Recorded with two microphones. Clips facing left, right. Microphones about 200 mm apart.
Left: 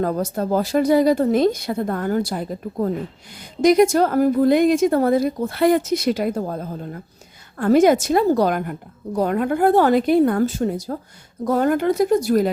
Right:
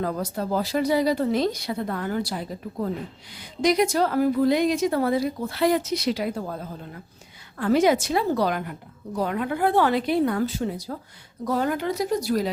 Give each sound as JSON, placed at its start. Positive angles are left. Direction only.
{"t": 0.0, "sound": "a woman's voice", "side_deg": 45}